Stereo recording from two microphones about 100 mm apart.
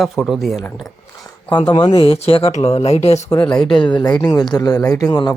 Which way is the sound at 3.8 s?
50° left (ahead or behind).